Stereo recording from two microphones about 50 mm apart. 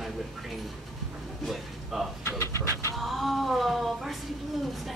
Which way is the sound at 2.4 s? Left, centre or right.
Left.